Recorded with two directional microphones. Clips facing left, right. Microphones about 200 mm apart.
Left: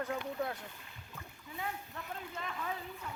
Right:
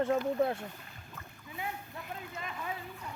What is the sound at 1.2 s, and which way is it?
Rowboat, 15° left (ahead or behind).